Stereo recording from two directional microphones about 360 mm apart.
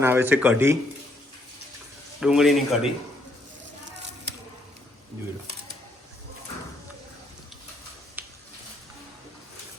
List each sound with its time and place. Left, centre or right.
0.0 s speech: centre
2.2 s speech: centre
8.2 s a sound: centre